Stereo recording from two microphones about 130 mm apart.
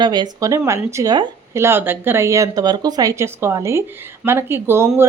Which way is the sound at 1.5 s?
20° right (ahead or behind).